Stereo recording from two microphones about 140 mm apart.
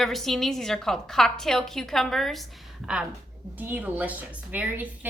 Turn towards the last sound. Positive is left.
turn(degrees=-10)  # may be behind; listen again after turning